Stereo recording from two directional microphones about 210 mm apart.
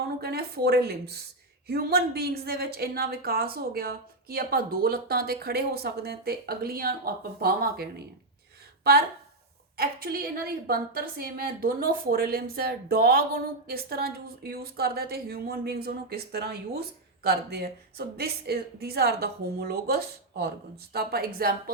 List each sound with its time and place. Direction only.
0.2 s a woman's voice: 50° right (ahead or behind)